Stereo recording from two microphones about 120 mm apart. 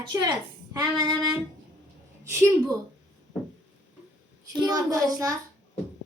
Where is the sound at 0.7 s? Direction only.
35° right (ahead or behind).